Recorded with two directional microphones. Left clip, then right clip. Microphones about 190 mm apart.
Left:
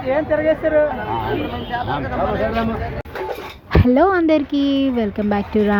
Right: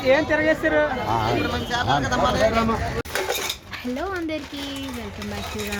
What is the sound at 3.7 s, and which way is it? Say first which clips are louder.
Speech: left 18 dB; 45° left (ahead or behind).